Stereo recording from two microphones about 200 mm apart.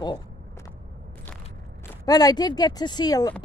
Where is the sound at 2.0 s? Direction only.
20° left (ahead or behind).